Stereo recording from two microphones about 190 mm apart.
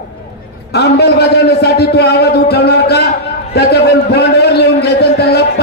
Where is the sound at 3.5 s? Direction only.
55° left (ahead or behind).